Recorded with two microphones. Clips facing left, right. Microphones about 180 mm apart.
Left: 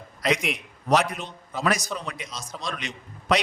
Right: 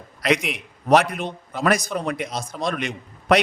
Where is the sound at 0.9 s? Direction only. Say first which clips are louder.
Right 5 dB; 55° right (ahead or behind).